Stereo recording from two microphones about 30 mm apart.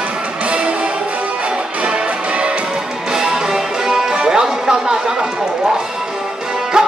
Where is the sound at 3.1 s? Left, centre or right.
Centre.